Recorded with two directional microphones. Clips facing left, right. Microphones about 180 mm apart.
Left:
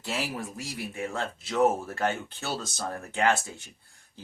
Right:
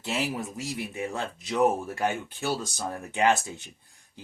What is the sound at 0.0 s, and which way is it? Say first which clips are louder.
Speech: right 3 dB; 20° right (ahead or behind).